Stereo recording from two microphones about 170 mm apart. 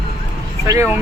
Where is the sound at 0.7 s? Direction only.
15° right (ahead or behind).